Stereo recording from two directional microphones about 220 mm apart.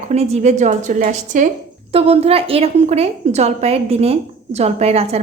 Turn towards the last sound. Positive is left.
turn(degrees=-30)  # may be behind; listen again after turning